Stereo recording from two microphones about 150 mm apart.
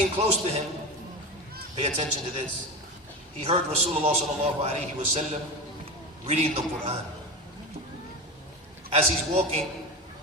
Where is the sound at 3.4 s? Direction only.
45° right (ahead or behind).